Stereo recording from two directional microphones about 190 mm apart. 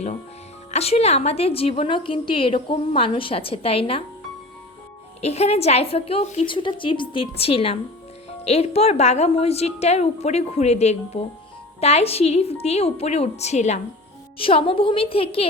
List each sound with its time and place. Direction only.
0.7 s a woman's voice: 35° left (ahead or behind)
5.2 s a woman's voice: 35° left (ahead or behind)